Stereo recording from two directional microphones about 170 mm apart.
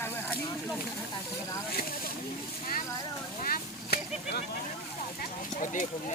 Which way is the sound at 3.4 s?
60° left (ahead or behind).